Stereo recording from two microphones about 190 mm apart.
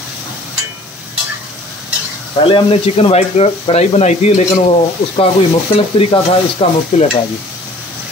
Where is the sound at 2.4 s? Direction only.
30° left (ahead or behind).